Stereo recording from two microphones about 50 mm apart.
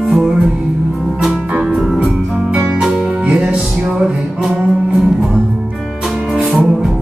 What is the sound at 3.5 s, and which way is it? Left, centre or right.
Music, right.